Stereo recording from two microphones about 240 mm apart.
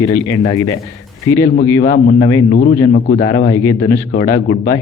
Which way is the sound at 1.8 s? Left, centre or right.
Left.